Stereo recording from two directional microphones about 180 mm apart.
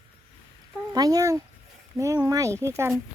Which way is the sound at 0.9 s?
20° right (ahead or behind).